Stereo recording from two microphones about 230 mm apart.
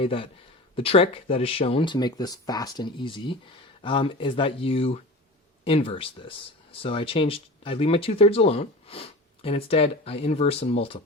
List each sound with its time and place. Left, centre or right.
0.0 s speech: left